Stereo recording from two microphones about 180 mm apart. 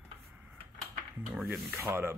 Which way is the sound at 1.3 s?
5° right (ahead or behind).